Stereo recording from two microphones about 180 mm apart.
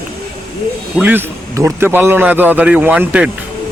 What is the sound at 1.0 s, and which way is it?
Speech, 10° right (ahead or behind).